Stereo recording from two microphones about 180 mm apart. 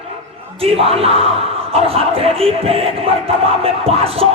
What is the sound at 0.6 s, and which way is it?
Music, 35° right (ahead or behind).